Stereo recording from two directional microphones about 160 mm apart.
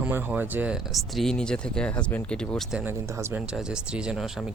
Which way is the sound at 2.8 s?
15° right (ahead or behind).